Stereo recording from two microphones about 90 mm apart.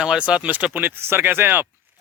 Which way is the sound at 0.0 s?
10° right (ahead or behind).